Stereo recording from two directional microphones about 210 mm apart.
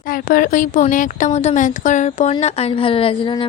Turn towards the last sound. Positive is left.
turn(degrees=25)  # may be behind; listen again after turning